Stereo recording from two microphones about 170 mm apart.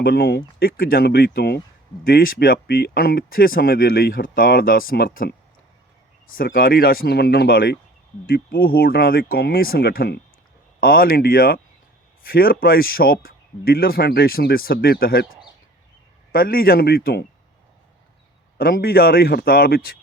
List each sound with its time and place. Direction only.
0.0 s speech: 65° left (ahead or behind)
2.0 s speech: 60° left (ahead or behind)
6.3 s speech: 60° left (ahead or behind)
16.3 s speech: 60° left (ahead or behind)
18.5 s speech: 60° left (ahead or behind)